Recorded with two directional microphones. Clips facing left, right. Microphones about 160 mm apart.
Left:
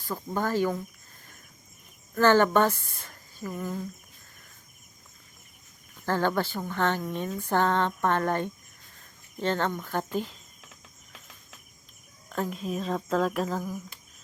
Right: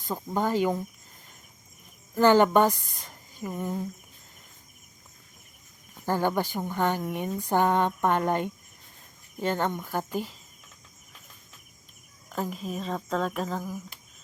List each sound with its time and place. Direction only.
0.0 s speech: 20° right (ahead or behind)
2.1 s speech: 15° right (ahead or behind)
6.1 s speech: 15° right (ahead or behind)
12.3 s speech: 5° right (ahead or behind)